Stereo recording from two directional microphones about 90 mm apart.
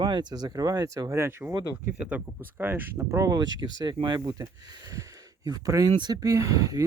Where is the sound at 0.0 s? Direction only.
55° right (ahead or behind); by 1.5 s 30° right (ahead or behind).